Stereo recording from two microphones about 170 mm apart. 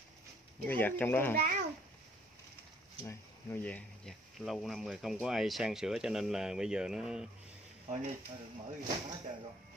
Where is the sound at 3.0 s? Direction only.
10° left (ahead or behind).